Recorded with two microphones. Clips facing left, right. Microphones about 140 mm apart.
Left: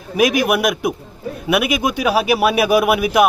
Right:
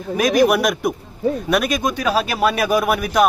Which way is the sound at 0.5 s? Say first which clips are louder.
Even; 5° left (ahead or behind).